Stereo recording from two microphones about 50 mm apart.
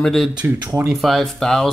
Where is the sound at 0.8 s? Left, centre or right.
Centre.